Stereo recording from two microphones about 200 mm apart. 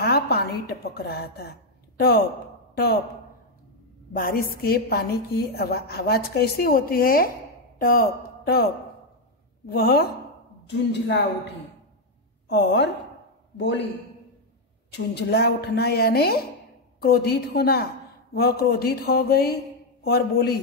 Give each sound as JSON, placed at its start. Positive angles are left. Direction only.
{"t": 0.0, "sound": "a woman's voice", "side_deg": 55}
{"t": 4.1, "sound": "a woman's voice", "side_deg": 45}
{"t": 9.7, "sound": "a woman's voice", "side_deg": 50}
{"t": 12.4, "sound": "a woman's voice", "side_deg": 60}
{"t": 14.9, "sound": "a woman's voice", "side_deg": 55}